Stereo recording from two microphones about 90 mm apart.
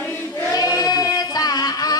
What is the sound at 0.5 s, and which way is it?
Female singing, 45° left (ahead or behind).